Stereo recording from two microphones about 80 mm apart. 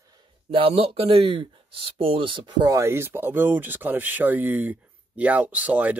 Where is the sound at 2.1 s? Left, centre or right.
Right.